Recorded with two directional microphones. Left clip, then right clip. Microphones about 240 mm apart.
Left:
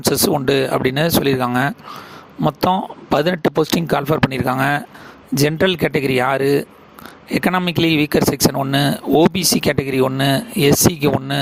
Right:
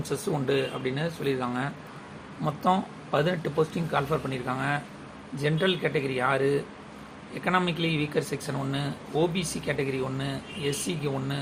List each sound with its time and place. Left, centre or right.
0.1 s speech: left